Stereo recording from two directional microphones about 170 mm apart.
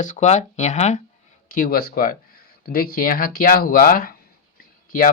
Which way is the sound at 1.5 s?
60° left (ahead or behind).